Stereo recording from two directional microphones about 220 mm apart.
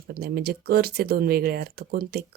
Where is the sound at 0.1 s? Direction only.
45° right (ahead or behind).